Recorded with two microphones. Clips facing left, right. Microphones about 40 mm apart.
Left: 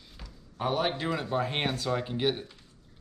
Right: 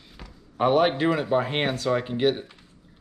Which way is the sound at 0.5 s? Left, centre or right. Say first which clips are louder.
Right 9 dB; right.